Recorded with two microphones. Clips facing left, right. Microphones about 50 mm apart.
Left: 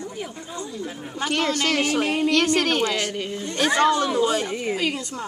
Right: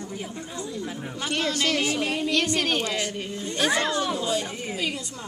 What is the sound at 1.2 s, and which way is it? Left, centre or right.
A woman's voice, left.